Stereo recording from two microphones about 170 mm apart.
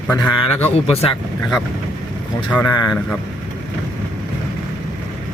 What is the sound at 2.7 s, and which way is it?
Speech, 20° left (ahead or behind).